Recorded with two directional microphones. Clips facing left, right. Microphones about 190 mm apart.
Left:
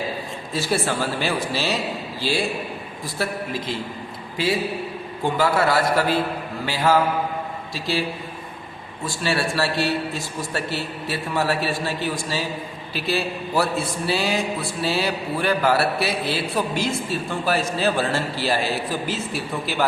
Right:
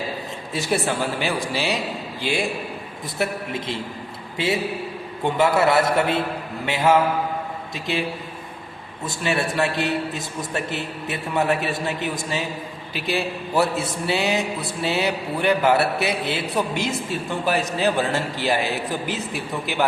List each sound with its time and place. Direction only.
0.5 s a man's voice: 20° right (ahead or behind)
9.0 s a man's voice: 20° right (ahead or behind)